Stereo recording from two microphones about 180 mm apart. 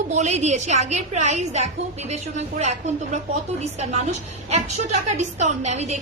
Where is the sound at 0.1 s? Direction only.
40° right (ahead or behind).